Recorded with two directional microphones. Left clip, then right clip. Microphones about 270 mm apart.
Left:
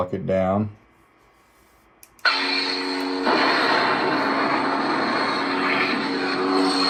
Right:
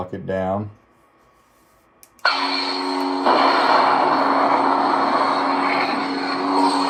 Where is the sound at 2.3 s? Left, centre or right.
Centre.